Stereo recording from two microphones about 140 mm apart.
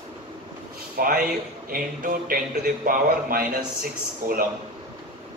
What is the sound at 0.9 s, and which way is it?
Speech, 90° right.